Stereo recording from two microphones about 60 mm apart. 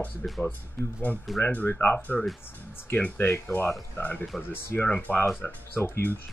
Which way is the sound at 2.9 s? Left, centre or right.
Left.